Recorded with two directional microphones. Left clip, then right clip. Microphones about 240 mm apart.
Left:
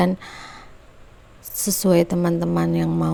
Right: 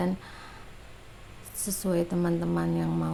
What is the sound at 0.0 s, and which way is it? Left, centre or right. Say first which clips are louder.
A woman's voice: left 10 dB; left.